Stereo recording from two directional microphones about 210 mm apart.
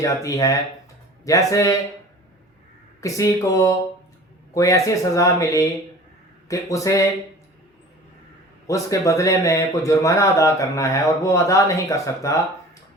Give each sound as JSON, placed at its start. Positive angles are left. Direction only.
{"t": 0.0, "sound": "speech", "side_deg": 15}
{"t": 3.0, "sound": "speech", "side_deg": 15}
{"t": 8.6, "sound": "speech", "side_deg": 15}